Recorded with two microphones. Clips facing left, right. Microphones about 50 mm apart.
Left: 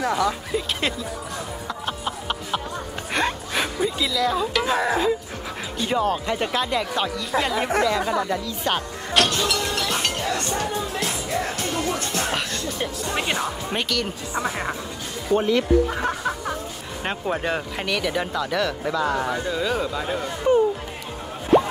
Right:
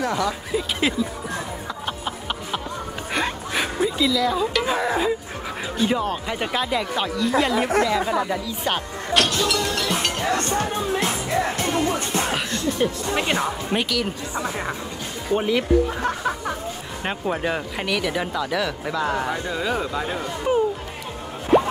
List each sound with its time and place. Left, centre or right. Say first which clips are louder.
0.5 s speech: right 2 dB; centre
1.9 s a sound: left 1 dB; centre
5.8 s speech: even; centre
9.4 s music: right 1 dB; centre
10.3 s music: right 2 dB; right
12.8 s speech: right 2 dB; centre
14.3 s speech: left 4 dB; left
15.3 s speech: left 1 dB; centre
16.1 s music: right 1 dB; centre
17.0 s speech: right 1 dB; centre